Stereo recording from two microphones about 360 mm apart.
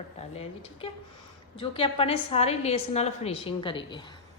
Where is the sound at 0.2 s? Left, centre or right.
Centre.